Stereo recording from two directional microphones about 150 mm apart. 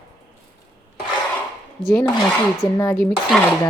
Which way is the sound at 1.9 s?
5° left (ahead or behind).